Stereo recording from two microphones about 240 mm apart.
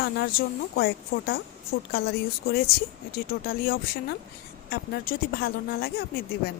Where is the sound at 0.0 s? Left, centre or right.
Left.